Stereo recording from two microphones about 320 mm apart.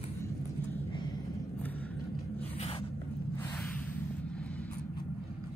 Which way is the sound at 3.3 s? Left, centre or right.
Centre.